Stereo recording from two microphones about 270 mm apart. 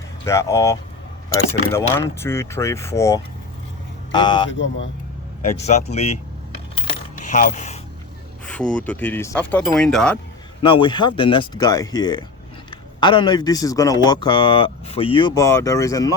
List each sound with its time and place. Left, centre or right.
0.3 s speech: centre
4.4 s speech: left
5.5 s speech: left
7.2 s mechanisms: left
8.4 s speech: centre
10.7 s speech: centre